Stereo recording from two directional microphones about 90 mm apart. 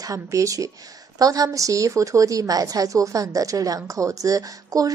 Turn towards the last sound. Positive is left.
turn(degrees=-40)  # may be behind; listen again after turning